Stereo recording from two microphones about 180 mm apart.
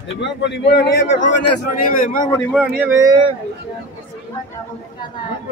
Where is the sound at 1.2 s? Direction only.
50° left (ahead or behind).